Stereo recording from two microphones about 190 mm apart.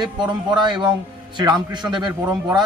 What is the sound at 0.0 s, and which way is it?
Speech, 25° right (ahead or behind).